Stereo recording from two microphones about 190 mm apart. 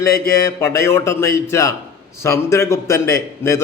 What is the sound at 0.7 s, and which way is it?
A man's voice, 15° left (ahead or behind).